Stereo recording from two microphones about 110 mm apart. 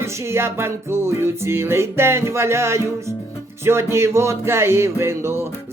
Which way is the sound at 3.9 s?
25° right (ahead or behind).